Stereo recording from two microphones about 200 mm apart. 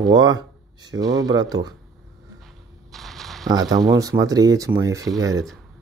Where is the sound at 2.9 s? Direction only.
Centre (ahead or behind).